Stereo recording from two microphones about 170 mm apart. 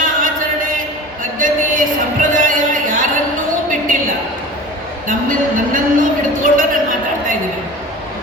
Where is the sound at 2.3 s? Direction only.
50° right (ahead or behind).